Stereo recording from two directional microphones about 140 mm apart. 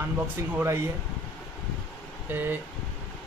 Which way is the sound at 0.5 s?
20° right (ahead or behind).